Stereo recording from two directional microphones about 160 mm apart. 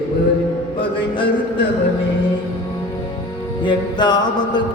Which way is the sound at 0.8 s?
30° left (ahead or behind).